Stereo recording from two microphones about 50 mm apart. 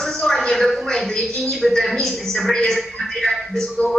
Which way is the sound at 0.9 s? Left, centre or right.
Centre.